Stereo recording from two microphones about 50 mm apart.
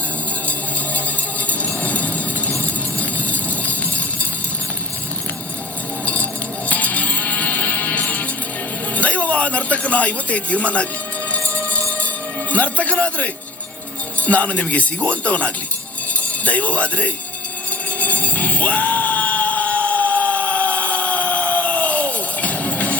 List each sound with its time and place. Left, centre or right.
1.5 s music: left
3.0 s a sound: left
6.7 s music: left
9.0 s a sound: left
11.4 s music: left
12.5 s speech: left
18.0 s music: left